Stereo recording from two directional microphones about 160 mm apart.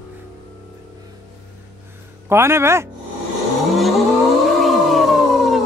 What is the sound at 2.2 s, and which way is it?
Speech, 15° right (ahead or behind).